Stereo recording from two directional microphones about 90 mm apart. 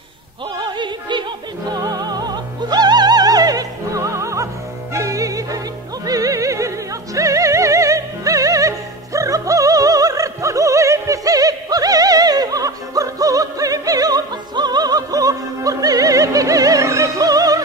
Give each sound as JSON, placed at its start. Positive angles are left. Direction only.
{"t": 0.6, "sound": "music", "side_deg": -60}
{"t": 1.7, "sound": "music", "side_deg": -45}